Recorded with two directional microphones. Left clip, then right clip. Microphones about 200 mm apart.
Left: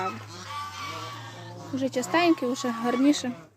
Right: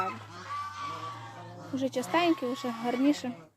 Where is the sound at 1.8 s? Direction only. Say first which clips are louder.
Left 4 dB; 5° right (ahead or behind).